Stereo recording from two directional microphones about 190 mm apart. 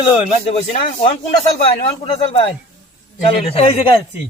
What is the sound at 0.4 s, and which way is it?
Speech, 30° left (ahead or behind).